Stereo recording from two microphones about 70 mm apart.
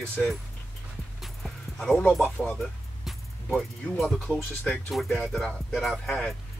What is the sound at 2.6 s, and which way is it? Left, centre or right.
Music, centre.